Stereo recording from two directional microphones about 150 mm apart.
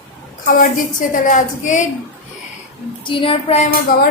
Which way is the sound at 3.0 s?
35° left (ahead or behind).